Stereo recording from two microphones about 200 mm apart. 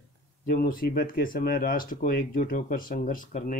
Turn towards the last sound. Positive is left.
turn(degrees=40)  # may be behind; listen again after turning